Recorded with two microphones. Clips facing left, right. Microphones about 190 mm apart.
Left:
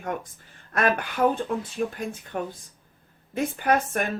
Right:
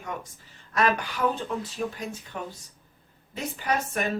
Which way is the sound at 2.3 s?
50° left (ahead or behind).